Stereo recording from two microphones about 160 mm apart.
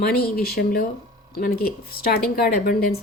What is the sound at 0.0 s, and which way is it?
Speech, 75° left (ahead or behind).